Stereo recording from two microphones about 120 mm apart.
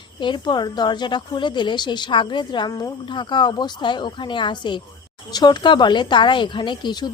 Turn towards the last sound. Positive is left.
turn(degrees=40)  # may be behind; listen again after turning